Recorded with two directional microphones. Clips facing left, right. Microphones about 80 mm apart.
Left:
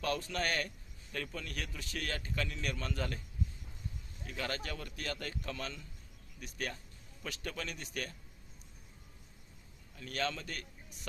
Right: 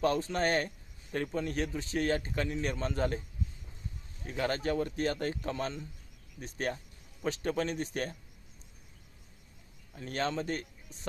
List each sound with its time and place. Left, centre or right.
0.0 s a man's voice: right
9.9 s a man's voice: right